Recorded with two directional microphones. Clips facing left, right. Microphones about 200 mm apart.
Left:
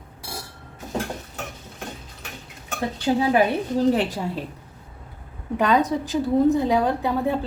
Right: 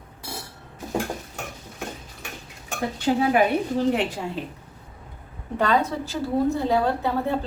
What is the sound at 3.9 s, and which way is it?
Speech, 35° left (ahead or behind).